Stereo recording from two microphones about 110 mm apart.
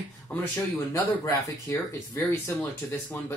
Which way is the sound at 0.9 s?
30° left (ahead or behind).